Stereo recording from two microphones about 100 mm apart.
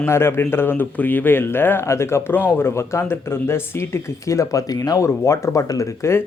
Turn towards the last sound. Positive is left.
turn(degrees=30)  # may be behind; listen again after turning